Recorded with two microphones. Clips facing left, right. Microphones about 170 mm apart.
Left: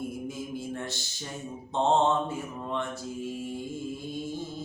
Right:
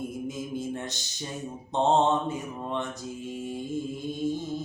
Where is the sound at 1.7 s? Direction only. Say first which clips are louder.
Right 1 dB; 20° right (ahead or behind).